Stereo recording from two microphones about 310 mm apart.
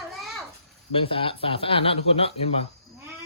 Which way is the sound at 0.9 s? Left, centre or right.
Centre.